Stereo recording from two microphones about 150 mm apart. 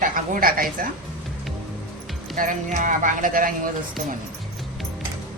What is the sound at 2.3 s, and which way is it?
Speech, 60° right (ahead or behind).